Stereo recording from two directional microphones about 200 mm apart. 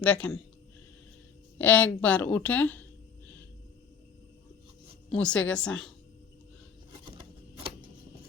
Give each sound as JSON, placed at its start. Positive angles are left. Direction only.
{"t": 0.0, "sound": "a woman's voice", "side_deg": 5}
{"t": 1.5, "sound": "a woman's voice", "side_deg": 10}
{"t": 5.0, "sound": "a woman's voice", "side_deg": 5}